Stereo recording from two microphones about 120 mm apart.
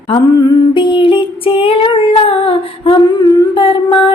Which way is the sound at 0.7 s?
40° left (ahead or behind).